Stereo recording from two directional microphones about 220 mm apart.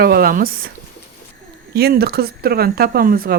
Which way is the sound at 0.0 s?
45° right (ahead or behind).